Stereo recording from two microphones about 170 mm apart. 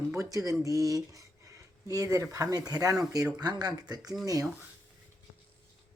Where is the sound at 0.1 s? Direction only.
20° right (ahead or behind).